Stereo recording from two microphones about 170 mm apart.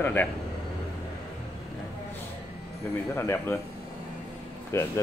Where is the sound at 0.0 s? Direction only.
10° left (ahead or behind).